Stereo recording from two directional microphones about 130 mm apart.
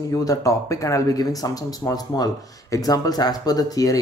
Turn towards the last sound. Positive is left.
turn(degrees=25)  # may be behind; listen again after turning